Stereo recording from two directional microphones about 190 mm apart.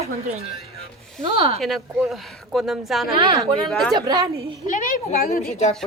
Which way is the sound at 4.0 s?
20° right (ahead or behind).